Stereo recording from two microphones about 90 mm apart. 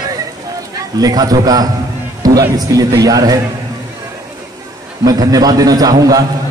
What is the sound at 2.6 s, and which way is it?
Speech, 40° right (ahead or behind).